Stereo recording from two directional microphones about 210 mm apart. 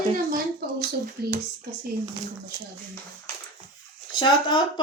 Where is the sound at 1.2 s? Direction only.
50° right (ahead or behind).